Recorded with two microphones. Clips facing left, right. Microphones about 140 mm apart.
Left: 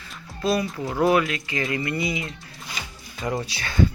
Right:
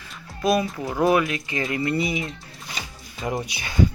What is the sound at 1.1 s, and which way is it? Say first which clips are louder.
Speech: even; 20° right (ahead or behind).